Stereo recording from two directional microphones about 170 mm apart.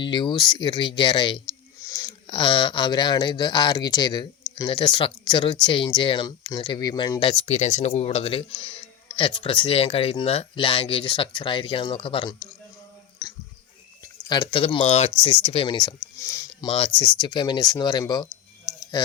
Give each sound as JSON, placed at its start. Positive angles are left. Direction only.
{"t": 0.0, "sound": "speech", "side_deg": 30}
{"t": 14.3, "sound": "speech", "side_deg": 25}
{"t": 16.2, "sound": "a sound", "side_deg": 20}
{"t": 16.6, "sound": "speech", "side_deg": 35}
{"t": 18.8, "sound": "tick", "side_deg": 25}